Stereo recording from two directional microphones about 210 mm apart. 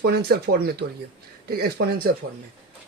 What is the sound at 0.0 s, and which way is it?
Speech, 50° right (ahead or behind).